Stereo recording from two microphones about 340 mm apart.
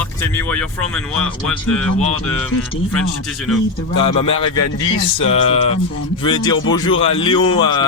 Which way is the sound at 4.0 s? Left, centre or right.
Centre.